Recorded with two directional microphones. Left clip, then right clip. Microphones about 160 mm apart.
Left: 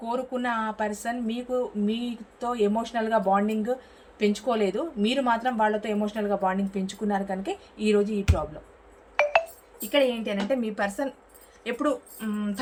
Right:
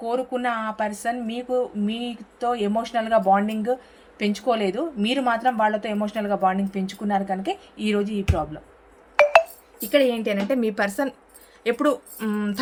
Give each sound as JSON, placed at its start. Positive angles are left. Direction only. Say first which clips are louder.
{"t": 0.0, "sound": "speech", "louder": "right 4 dB", "side_deg": -40}
{"t": 9.2, "sound": "telephone dialing", "louder": "right 7 dB", "side_deg": 0}
{"t": 9.9, "sound": "a woman's voice", "louder": "right 4 dB", "side_deg": -70}